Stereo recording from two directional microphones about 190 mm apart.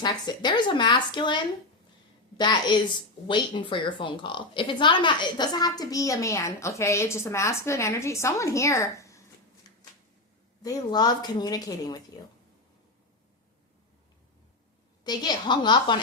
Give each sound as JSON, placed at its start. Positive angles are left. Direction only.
{"t": 0.0, "sound": "a woman's voice", "side_deg": 25}
{"t": 10.6, "sound": "speech", "side_deg": 20}
{"t": 15.0, "sound": "speech", "side_deg": 20}